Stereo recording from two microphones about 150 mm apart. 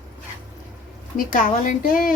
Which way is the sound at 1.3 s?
60° left (ahead or behind).